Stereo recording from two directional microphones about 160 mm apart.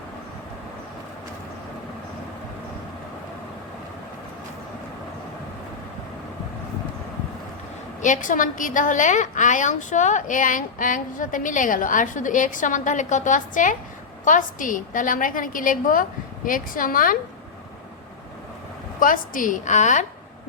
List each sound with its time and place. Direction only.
8.0 s a woman's voice: 55° left (ahead or behind)
18.9 s a woman's voice: 60° left (ahead or behind)